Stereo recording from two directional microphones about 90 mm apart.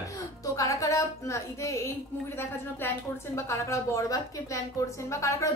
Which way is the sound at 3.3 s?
30° left (ahead or behind).